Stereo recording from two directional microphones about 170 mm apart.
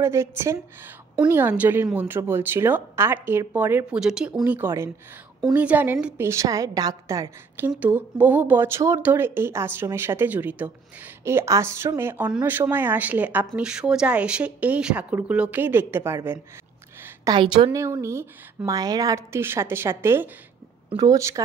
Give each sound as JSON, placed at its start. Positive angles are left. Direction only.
{"t": 0.0, "sound": "a woman's voice", "side_deg": -15}
{"t": 17.0, "sound": "a sound", "side_deg": -20}
{"t": 17.6, "sound": "speech", "side_deg": -15}